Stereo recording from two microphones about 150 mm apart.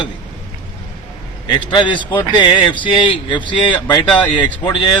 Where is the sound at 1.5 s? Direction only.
30° left (ahead or behind).